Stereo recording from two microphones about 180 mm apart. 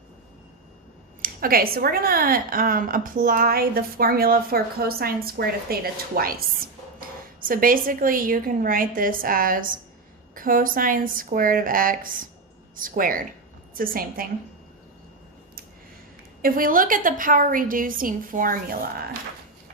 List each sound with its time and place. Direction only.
1.2 s a woman's voice: 55° right (ahead or behind)
16.4 s a woman's voice: 50° right (ahead or behind)